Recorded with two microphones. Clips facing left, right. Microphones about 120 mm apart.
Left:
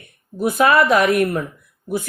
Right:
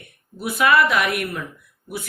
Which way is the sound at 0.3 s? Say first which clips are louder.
Left 3 dB; 45° left (ahead or behind).